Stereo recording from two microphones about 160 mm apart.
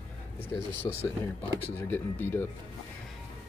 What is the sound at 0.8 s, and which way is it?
Speech, 25° left (ahead or behind).